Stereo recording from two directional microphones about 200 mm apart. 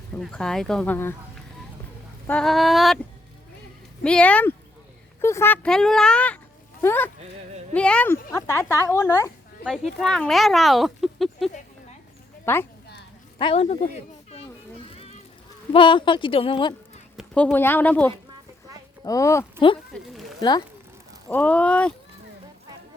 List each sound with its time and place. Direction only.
0.1 s speech: 5° left (ahead or behind)
2.2 s speech: 5° left (ahead or behind)
4.0 s speech: 5° left (ahead or behind)
9.6 s speech: centre (ahead or behind)
12.5 s speech: 10° left (ahead or behind)
13.4 s speech: 30° left (ahead or behind)
15.7 s a woman's voice: 25° left (ahead or behind)
17.2 s speech: 5° left (ahead or behind); by 19.8 s 25° left (ahead or behind)
19.9 s a sound: centre (ahead or behind)
20.4 s a woman's voice: 20° left (ahead or behind)
21.2 s speech: 5° left (ahead or behind)